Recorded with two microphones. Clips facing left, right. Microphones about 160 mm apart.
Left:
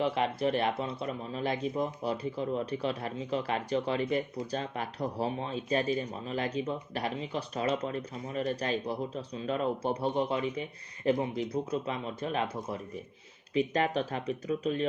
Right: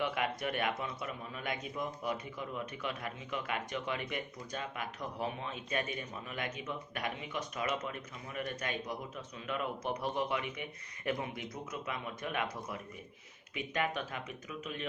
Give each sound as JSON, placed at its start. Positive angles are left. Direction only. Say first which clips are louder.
{"t": 0.0, "sound": "speech", "louder": "left 6 dB", "side_deg": 30}